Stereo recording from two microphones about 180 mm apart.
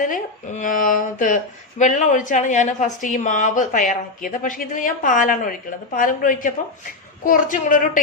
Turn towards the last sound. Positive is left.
turn(degrees=45)  # may be behind; listen again after turning